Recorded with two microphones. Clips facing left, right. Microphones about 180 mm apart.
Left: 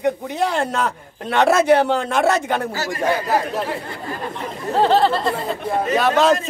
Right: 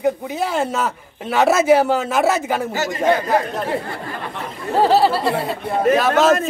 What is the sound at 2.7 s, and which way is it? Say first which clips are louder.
Speech: right 3 dB; 20° right (ahead or behind).